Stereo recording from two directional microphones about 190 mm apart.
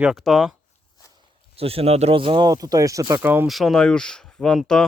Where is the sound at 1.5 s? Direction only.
30° right (ahead or behind); by 3.5 s 10° right (ahead or behind).